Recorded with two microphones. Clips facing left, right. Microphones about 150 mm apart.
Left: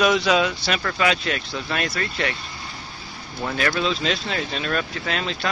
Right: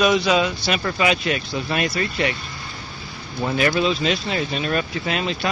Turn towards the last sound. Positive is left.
turn(degrees=-10)  # may be behind; listen again after turning